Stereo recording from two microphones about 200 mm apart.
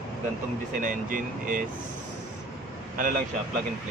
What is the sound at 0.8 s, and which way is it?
Speech, 45° right (ahead or behind).